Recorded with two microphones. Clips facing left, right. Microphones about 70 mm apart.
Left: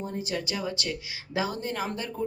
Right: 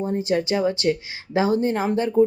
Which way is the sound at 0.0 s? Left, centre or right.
Right.